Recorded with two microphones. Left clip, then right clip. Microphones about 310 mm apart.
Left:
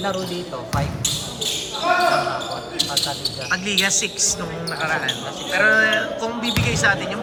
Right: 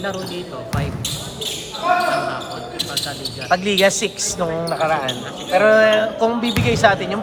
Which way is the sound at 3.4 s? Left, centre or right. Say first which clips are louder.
Right 5 dB; centre.